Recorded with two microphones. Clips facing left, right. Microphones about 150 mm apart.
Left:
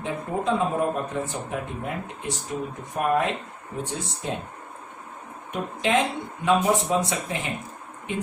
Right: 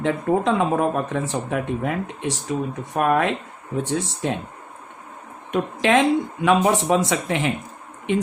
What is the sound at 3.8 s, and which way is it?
Speech, 90° right.